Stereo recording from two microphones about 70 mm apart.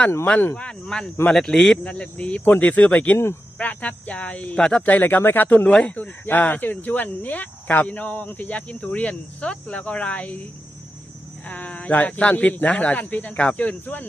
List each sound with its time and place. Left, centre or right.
0.5 s speech: centre
4.9 s speech: left
11.4 s speech: left